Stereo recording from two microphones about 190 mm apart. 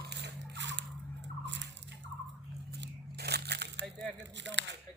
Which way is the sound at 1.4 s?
65° right (ahead or behind).